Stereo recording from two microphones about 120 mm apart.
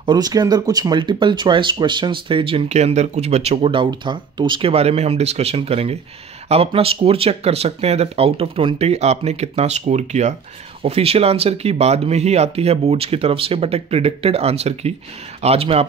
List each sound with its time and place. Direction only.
0.0 s speech: 35° right (ahead or behind)
2.7 s speech: 70° right (ahead or behind)
10.8 s speech: 55° right (ahead or behind)